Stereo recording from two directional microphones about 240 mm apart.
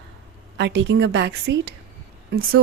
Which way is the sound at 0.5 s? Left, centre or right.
Right.